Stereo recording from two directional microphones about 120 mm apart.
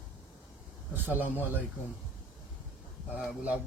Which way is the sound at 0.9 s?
15° right (ahead or behind).